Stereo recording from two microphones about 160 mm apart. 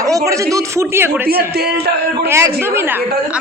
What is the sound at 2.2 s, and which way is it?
Speech, 15° right (ahead or behind).